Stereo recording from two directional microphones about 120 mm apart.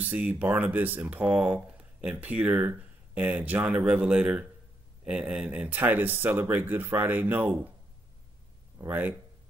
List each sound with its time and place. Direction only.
0.0 s speech: 15° right (ahead or behind)
8.7 s speech: 15° right (ahead or behind)